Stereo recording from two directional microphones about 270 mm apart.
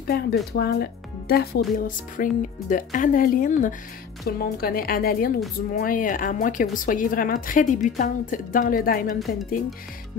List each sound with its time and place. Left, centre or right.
0.0 s a woman's voice: left